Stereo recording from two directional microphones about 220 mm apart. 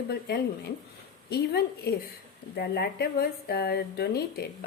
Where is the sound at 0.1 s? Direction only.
45° left (ahead or behind).